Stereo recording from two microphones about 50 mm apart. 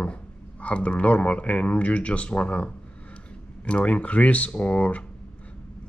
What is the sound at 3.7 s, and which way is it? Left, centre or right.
Speech, left.